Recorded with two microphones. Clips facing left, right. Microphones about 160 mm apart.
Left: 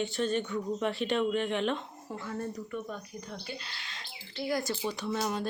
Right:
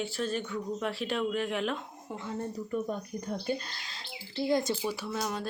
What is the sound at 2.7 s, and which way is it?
Speech, 45° right (ahead or behind).